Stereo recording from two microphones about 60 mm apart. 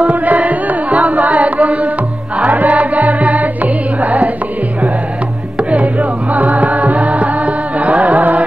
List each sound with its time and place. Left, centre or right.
0.0 s carnatic music: right
2.4 s music: right
5.6 s music: right